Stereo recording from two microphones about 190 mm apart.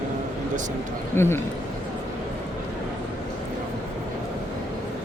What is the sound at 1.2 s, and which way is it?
Speech, 15° left (ahead or behind).